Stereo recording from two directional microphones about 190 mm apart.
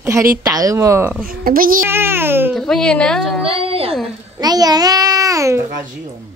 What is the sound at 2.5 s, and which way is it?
Speech, centre (ahead or behind).